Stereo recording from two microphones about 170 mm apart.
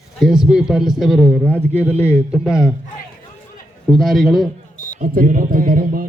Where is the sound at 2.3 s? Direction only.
5° right (ahead or behind).